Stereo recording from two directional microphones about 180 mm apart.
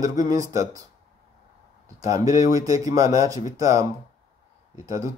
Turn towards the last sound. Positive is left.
turn(degrees=-20)  # may be behind; listen again after turning